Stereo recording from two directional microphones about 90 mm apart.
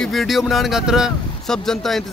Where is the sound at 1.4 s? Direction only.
5° left (ahead or behind).